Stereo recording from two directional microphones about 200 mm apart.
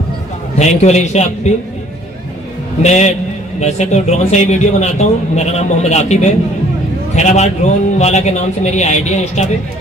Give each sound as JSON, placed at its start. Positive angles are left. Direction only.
{"t": 0.6, "sound": "a man's voice", "side_deg": 35}
{"t": 2.8, "sound": "a man's voice", "side_deg": 35}